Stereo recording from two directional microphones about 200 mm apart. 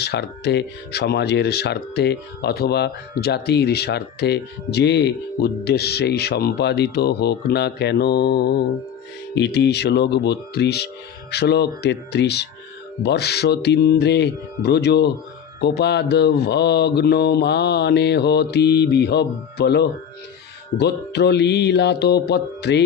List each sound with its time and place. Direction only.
0.0 s speech: 55° left (ahead or behind)